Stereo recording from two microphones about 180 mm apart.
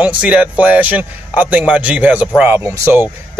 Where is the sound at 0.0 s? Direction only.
10° right (ahead or behind).